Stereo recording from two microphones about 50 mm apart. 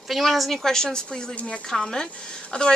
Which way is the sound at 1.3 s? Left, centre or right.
Left.